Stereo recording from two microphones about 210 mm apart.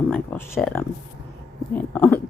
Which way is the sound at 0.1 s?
10° left (ahead or behind).